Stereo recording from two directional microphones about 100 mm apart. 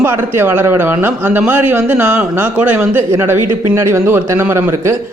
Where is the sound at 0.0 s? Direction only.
25° right (ahead or behind).